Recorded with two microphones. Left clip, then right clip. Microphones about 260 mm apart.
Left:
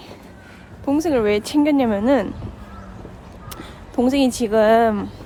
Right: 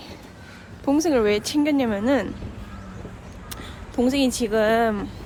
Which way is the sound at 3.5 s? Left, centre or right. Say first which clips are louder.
Left 4 dB; centre.